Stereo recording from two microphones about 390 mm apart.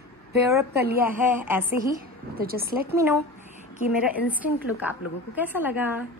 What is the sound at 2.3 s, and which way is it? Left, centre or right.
Speech, right.